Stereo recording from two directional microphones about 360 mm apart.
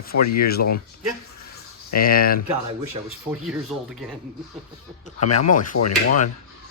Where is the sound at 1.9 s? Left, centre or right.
Left.